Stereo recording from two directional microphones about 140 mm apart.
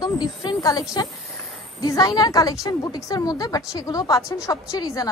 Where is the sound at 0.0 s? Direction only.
30° left (ahead or behind).